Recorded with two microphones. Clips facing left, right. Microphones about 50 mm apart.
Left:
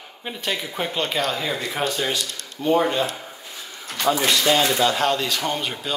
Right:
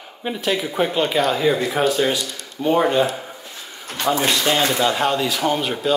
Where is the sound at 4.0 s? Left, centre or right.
Right.